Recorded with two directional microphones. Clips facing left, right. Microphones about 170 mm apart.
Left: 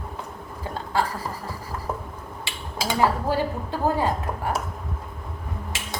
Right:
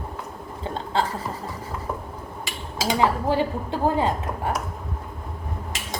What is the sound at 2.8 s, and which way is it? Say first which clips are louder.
Speech: right 1 dB; 20° right (ahead or behind).